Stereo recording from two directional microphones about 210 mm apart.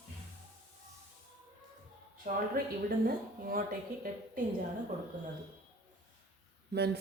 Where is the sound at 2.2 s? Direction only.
40° right (ahead or behind).